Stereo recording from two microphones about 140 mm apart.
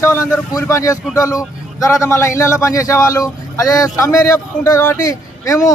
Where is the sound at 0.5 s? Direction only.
25° left (ahead or behind).